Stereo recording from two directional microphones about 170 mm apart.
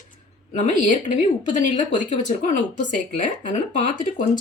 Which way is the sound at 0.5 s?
45° left (ahead or behind).